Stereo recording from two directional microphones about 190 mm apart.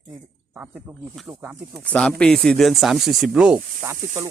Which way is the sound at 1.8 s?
5° left (ahead or behind).